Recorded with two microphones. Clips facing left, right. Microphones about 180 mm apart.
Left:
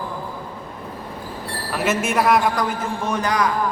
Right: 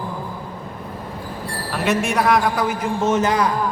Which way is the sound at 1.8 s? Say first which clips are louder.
Right 1 dB; centre (ahead or behind).